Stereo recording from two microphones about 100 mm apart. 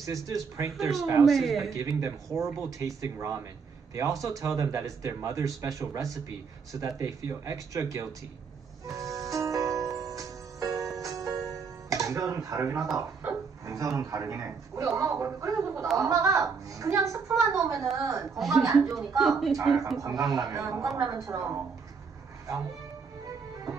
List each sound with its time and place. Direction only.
0.0 s speech: 35° right (ahead or behind)
1.2 s speech: centre (ahead or behind)
1.6 s speech: 35° right (ahead or behind)
8.8 s music: 35° right (ahead or behind)
13.2 s a man's voice: 30° right (ahead or behind)
18.9 s speech: centre (ahead or behind)
20.3 s speech: 40° right (ahead or behind)